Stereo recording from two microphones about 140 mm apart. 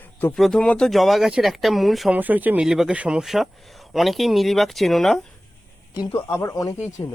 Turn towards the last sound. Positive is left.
turn(degrees=20)  # may be behind; listen again after turning